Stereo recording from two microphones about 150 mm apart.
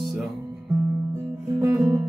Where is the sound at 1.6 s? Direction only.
10° right (ahead or behind).